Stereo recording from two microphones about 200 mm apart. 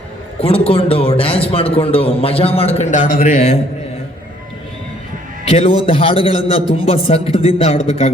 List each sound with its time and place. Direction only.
0.3 s a man's voice: 30° left (ahead or behind)
5.5 s a man's voice: 25° left (ahead or behind)